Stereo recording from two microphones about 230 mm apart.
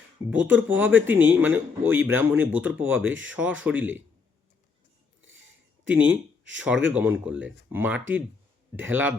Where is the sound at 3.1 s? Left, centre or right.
Right.